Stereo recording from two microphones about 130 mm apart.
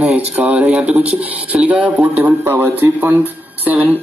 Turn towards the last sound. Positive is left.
turn(degrees=-10)  # may be behind; listen again after turning